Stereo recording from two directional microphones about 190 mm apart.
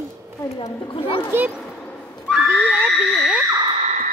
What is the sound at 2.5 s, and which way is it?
Speech, 10° right (ahead or behind).